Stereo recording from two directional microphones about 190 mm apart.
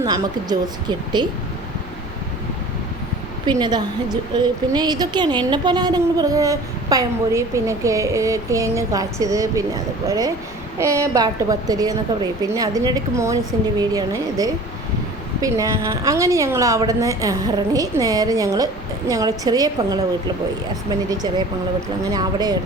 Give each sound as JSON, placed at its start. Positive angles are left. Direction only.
{"t": 0.0, "sound": "a woman's voice", "side_deg": -20}
{"t": 3.6, "sound": "a woman's voice", "side_deg": -20}